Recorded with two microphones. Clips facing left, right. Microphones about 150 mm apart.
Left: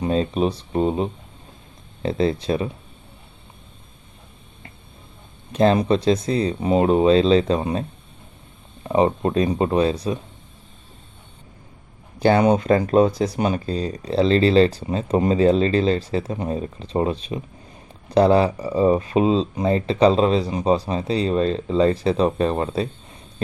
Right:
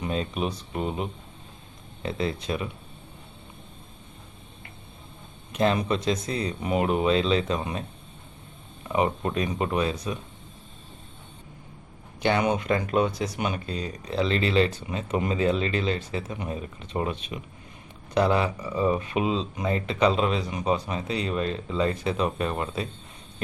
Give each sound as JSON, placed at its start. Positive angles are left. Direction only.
{"t": 0.0, "sound": "speech", "side_deg": 35}
{"t": 5.5, "sound": "speech", "side_deg": 30}
{"t": 12.2, "sound": "speech", "side_deg": 35}